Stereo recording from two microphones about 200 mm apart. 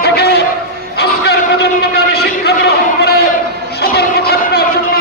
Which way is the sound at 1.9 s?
50° left (ahead or behind).